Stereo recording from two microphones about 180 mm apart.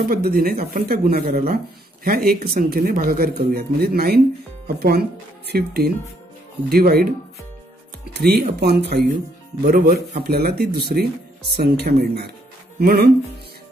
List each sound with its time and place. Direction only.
0.1 s speech: 55° right (ahead or behind)
8.1 s speech: 60° right (ahead or behind)
9.7 s speech: 55° right (ahead or behind)